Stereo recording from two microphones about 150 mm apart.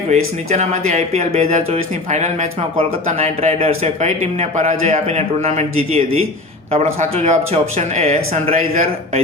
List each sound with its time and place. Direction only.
0.1 s speech: 50° right (ahead or behind)